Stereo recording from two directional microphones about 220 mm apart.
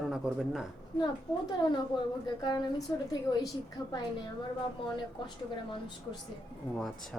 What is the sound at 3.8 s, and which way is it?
Speech, 20° left (ahead or behind).